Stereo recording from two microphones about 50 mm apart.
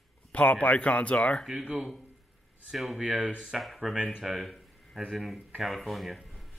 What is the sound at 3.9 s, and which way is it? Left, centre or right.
Speech, centre.